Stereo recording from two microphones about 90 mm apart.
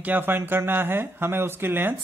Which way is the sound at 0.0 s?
20° right (ahead or behind).